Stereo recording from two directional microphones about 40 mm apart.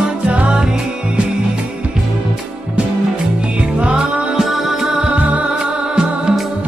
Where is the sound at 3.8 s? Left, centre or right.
Right.